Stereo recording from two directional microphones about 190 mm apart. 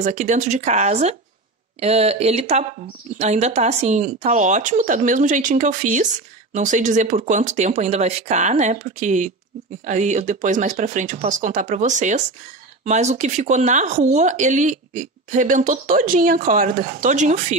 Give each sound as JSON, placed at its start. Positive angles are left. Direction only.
{"t": 0.0, "sound": "speech", "side_deg": -40}